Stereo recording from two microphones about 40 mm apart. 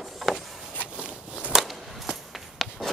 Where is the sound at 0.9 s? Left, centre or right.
Centre.